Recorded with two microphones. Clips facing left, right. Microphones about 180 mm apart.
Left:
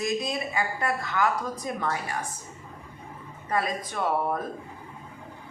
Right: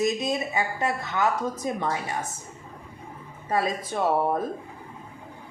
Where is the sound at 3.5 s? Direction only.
25° right (ahead or behind).